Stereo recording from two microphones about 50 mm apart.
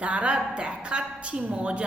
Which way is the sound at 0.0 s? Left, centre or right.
Right.